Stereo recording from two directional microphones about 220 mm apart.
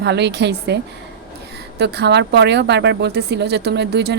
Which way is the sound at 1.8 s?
50° right (ahead or behind).